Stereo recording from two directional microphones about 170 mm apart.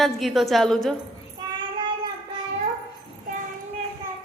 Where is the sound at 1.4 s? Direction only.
30° right (ahead or behind).